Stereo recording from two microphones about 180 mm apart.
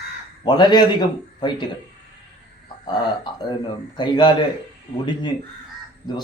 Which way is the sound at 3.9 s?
25° left (ahead or behind).